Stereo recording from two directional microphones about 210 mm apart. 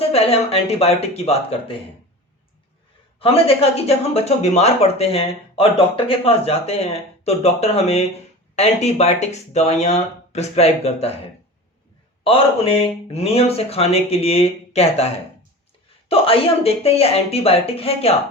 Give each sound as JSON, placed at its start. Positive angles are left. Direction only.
{"t": 0.1, "sound": "speech", "side_deg": 30}
{"t": 3.2, "sound": "speech", "side_deg": 25}
{"t": 12.2, "sound": "speech", "side_deg": 25}